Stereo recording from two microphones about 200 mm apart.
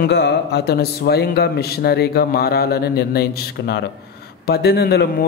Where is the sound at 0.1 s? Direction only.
60° left (ahead or behind).